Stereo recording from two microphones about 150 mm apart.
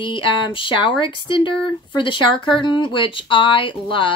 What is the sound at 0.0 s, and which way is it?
A woman's voice, 35° left (ahead or behind).